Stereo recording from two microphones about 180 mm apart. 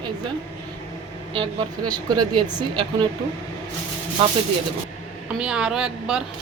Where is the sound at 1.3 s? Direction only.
25° right (ahead or behind).